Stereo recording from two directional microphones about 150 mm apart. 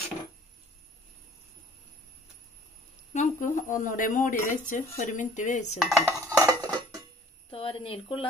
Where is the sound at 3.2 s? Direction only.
60° left (ahead or behind).